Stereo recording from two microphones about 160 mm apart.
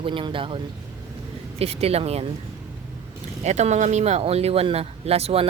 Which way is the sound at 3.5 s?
45° right (ahead or behind).